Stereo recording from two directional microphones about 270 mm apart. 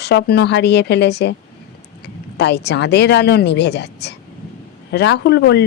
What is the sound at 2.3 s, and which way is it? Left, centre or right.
Speech, left.